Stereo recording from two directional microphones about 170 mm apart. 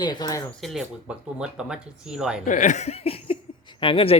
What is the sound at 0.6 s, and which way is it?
Speech, centre (ahead or behind).